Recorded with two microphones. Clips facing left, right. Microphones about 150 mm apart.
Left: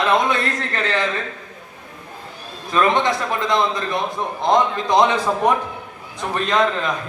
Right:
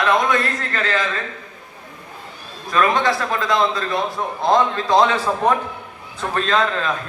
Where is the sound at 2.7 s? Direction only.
20° left (ahead or behind).